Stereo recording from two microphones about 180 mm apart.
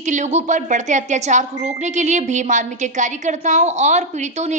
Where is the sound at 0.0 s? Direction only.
40° right (ahead or behind).